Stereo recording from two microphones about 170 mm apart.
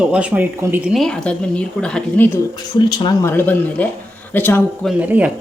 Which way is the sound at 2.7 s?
30° left (ahead or behind).